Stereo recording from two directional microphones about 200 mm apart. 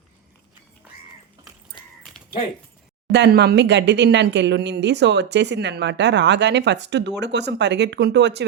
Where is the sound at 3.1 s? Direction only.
55° right (ahead or behind).